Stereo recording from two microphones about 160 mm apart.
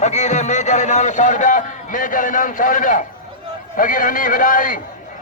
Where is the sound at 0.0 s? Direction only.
45° left (ahead or behind).